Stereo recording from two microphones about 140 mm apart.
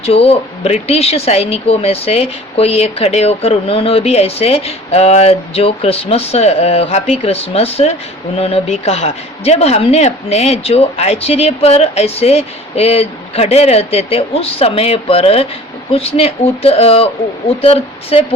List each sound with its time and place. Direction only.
0.0 s speech: 45° left (ahead or behind)